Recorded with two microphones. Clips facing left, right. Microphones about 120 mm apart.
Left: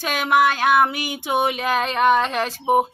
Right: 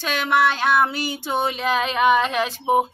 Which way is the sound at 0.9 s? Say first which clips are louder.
Right 1 dB; 55° left (ahead or behind).